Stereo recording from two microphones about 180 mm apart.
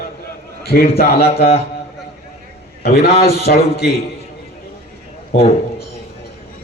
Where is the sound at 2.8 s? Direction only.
60° left (ahead or behind).